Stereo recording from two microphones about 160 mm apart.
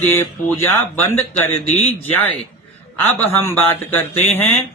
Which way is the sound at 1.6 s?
45° left (ahead or behind).